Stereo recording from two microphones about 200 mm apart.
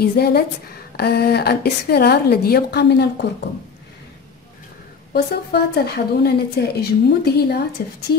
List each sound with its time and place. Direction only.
0.0 s a woman's voice: 50° left (ahead or behind)
5.1 s a woman's voice: 55° left (ahead or behind)